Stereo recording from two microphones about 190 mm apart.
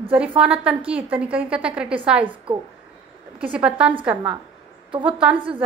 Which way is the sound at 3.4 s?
5° right (ahead or behind).